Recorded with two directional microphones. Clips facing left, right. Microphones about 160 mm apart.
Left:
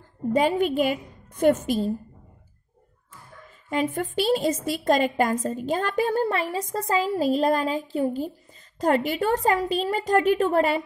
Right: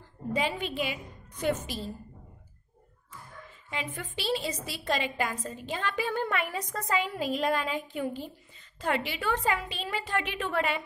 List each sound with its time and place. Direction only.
0.3 s a woman's voice: 45° left (ahead or behind)
3.7 s a woman's voice: 45° left (ahead or behind)